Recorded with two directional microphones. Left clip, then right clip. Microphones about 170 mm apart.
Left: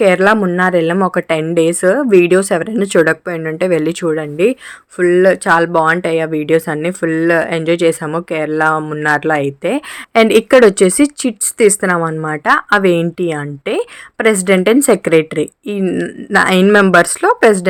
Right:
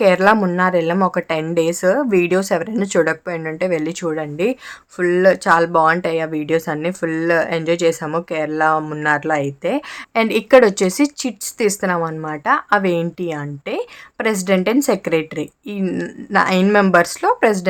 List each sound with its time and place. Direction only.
0.0 s speech: 10° left (ahead or behind)
16.3 s speech: 25° left (ahead or behind)